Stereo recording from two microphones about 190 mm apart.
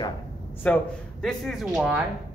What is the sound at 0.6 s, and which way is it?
Speech, 5° left (ahead or behind).